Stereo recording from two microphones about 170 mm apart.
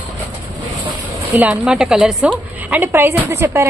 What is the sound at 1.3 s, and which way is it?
A woman's voice, 10° right (ahead or behind).